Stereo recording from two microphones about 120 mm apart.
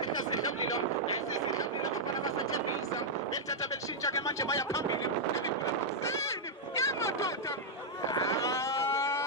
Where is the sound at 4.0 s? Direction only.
25° left (ahead or behind).